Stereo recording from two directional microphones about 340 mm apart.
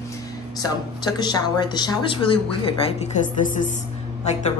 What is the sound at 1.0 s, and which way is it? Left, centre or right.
A man's voice, centre.